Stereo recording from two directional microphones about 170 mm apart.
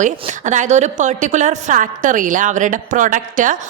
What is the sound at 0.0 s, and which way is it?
A woman's voice, 45° right (ahead or behind).